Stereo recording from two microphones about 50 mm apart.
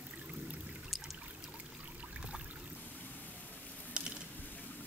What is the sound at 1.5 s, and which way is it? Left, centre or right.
Pour, right.